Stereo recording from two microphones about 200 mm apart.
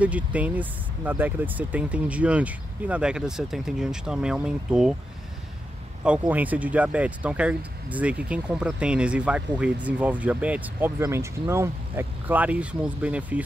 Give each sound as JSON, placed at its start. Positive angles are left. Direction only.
{"t": 0.0, "sound": "speech", "side_deg": -5}
{"t": 6.0, "sound": "speech", "side_deg": -10}